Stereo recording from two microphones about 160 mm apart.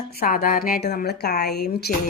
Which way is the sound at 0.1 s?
70° left (ahead or behind).